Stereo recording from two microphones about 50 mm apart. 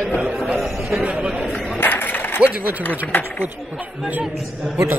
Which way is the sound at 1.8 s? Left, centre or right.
Left.